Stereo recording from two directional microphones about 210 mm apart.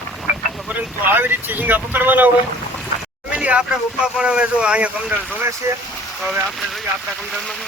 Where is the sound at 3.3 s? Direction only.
5° right (ahead or behind).